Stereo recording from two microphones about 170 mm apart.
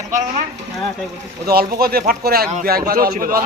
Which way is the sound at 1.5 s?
60° right (ahead or behind).